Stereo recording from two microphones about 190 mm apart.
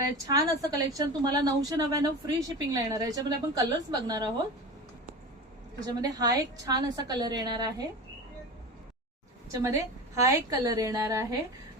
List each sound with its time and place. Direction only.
0.3 s a woman's voice: 20° right (ahead or behind)
5.8 s a woman's voice: 20° right (ahead or behind)
9.5 s a woman's voice: 15° right (ahead or behind)